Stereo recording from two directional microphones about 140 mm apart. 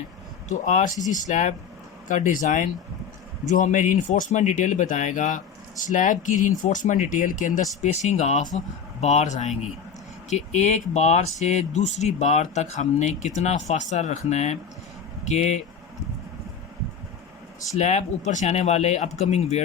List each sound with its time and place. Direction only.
0.4 s speech: 60° left (ahead or behind)
17.7 s speech: 55° left (ahead or behind)